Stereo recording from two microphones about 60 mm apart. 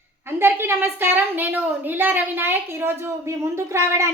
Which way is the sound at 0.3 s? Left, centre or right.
Right.